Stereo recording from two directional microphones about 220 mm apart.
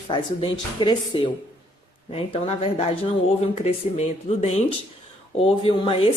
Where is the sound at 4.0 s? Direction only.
30° left (ahead or behind).